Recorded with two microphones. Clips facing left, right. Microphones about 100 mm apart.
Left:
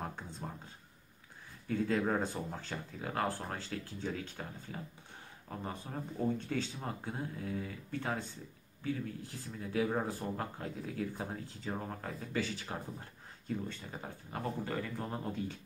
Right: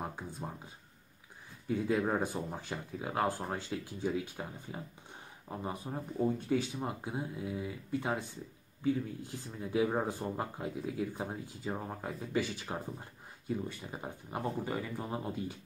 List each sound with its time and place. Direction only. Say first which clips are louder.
0.0 s speech: right 2 dB; 10° right (ahead or behind)
1.7 s speech: right 1 dB; 15° right (ahead or behind)